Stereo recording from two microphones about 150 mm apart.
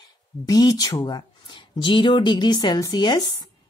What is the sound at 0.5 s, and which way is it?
A woman's voice, 25° left (ahead or behind).